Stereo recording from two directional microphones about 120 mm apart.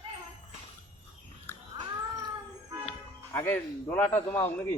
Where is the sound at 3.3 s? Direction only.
20° left (ahead or behind).